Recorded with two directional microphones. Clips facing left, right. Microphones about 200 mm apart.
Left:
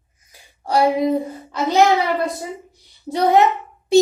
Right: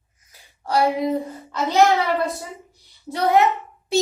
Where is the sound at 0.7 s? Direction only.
15° left (ahead or behind).